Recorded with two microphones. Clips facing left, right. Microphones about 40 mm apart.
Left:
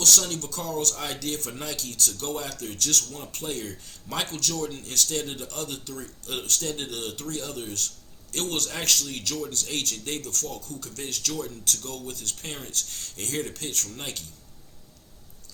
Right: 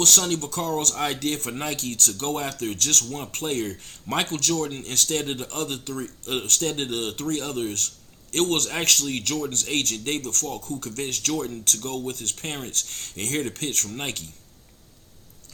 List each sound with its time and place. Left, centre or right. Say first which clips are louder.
0.0 s speech: right 3 dB; right